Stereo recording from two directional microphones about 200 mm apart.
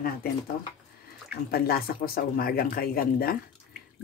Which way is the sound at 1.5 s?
50° left (ahead or behind).